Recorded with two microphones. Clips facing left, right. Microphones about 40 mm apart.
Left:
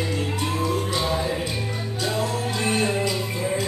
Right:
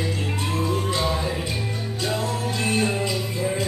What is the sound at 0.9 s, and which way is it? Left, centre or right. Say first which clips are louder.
Music: even; centre.